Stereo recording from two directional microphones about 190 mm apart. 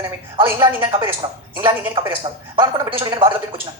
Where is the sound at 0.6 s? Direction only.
25° right (ahead or behind).